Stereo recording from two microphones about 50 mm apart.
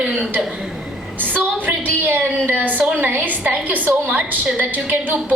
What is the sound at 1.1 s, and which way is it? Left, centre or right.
A woman's voice, right.